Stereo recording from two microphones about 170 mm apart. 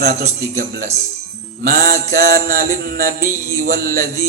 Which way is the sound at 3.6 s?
55° right (ahead or behind).